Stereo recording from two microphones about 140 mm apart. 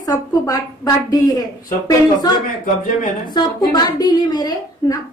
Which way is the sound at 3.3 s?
30° left (ahead or behind).